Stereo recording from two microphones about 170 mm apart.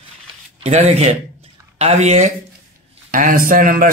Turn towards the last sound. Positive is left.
turn(degrees=-55)  # may be behind; listen again after turning